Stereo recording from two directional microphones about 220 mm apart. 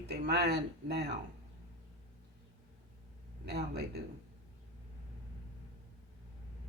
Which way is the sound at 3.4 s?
45° right (ahead or behind).